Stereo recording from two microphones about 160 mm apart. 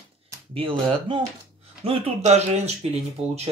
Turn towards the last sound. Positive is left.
turn(degrees=-45)  # may be behind; listen again after turning